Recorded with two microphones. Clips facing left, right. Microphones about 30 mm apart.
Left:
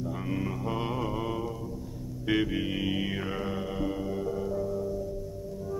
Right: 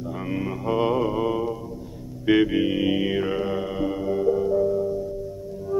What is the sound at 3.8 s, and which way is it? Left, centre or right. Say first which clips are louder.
Music: right 10 dB; right.